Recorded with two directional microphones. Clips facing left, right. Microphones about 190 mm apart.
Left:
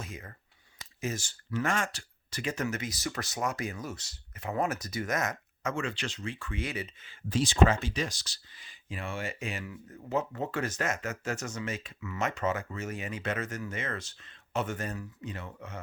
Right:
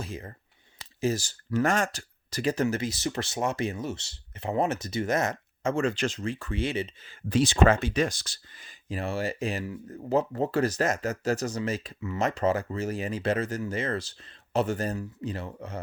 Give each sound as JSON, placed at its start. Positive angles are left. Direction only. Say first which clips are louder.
{"t": 0.0, "sound": "speech", "louder": "right 6 dB", "side_deg": -30}
{"t": 7.3, "sound": "speech", "louder": "right 4 dB", "side_deg": -65}